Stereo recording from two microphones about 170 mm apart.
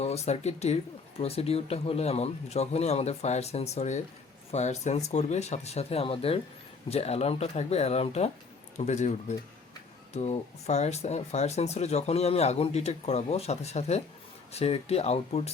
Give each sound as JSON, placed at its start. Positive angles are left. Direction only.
{"t": 0.0, "sound": "speech", "side_deg": 40}
{"t": 10.2, "sound": "speech", "side_deg": 40}